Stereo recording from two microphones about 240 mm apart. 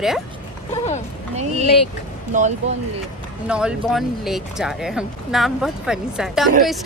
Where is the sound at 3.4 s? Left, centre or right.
Centre.